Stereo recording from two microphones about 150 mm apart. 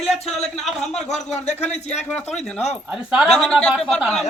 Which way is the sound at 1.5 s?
50° left (ahead or behind).